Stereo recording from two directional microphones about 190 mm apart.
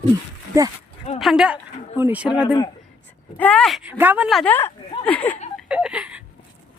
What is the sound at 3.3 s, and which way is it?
Speech, 5° left (ahead or behind).